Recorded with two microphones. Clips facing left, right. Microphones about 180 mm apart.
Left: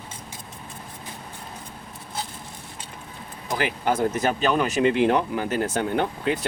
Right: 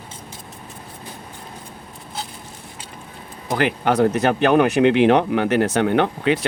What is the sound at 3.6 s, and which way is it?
Speech, 65° right (ahead or behind).